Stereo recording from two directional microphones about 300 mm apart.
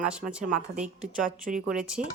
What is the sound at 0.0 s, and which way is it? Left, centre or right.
A woman's voice, centre.